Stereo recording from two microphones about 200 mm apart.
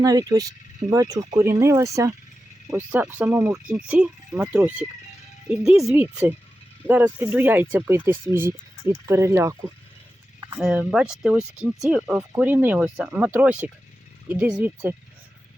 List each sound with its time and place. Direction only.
0.0 s speech: 20° right (ahead or behind)
10.6 s speech: 5° right (ahead or behind)